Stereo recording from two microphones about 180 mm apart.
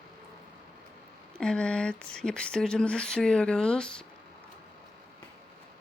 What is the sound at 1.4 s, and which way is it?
Speech, 5° left (ahead or behind).